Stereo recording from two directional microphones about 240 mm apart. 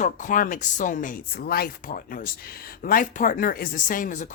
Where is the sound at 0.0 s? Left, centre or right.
Left.